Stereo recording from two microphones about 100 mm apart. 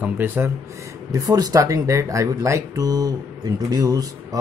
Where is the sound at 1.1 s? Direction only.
40° right (ahead or behind).